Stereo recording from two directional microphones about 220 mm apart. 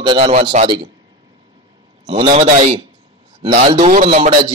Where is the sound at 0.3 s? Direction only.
35° right (ahead or behind).